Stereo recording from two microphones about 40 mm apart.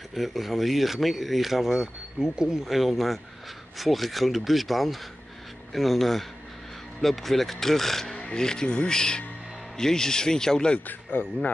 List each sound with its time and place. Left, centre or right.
0.1 s speech: centre
8.2 s speech: centre
10.9 s speech: left